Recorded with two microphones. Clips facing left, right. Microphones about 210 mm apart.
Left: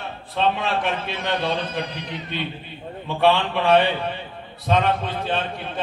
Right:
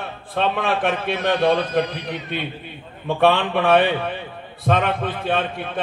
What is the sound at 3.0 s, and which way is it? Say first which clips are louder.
Speech: right 2 dB; 50° right (ahead or behind).